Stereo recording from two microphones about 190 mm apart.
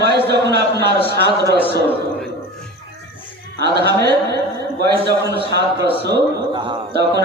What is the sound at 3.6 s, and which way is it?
Speech, 60° right (ahead or behind).